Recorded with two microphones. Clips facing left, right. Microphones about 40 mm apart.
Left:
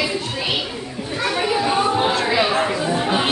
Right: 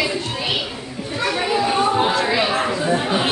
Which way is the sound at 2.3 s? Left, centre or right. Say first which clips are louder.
Left 1 dB; centre.